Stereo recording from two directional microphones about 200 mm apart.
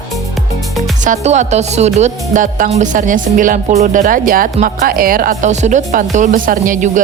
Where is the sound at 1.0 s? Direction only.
35° right (ahead or behind).